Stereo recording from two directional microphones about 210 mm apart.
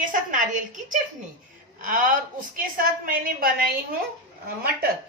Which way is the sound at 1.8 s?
40° right (ahead or behind).